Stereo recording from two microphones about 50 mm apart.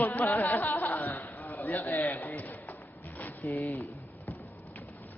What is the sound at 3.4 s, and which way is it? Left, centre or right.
Speech, left.